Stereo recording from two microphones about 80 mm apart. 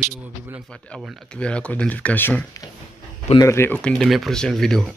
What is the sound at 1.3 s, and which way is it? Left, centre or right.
Speech, centre.